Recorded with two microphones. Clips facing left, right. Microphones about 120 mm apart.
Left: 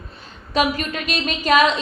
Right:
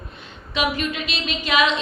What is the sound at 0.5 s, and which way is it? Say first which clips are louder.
A woman's voice: left 3 dB; 45° left (ahead or behind).